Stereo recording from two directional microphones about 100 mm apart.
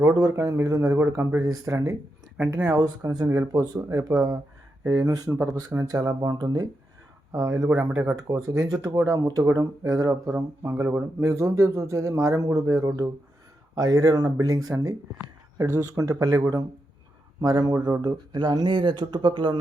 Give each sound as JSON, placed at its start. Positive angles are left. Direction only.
{"t": 0.0, "sound": "speech", "side_deg": -35}
{"t": 7.7, "sound": "speech", "side_deg": -15}
{"t": 8.4, "sound": "speech", "side_deg": -35}
{"t": 17.6, "sound": "speech", "side_deg": -45}